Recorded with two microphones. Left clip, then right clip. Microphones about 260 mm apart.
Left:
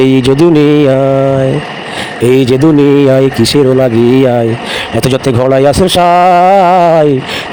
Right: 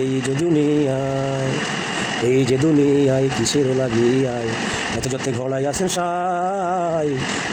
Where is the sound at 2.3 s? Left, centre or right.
Left.